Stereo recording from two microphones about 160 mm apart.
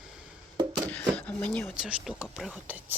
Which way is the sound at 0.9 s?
10° left (ahead or behind).